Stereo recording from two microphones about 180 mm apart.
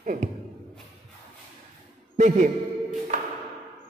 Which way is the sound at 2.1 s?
45° right (ahead or behind).